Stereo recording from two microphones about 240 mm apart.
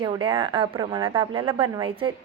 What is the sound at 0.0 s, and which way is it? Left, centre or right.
A woman's voice, right.